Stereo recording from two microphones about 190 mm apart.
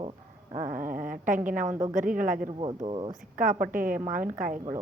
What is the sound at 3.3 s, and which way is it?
A woman's voice, 45° right (ahead or behind).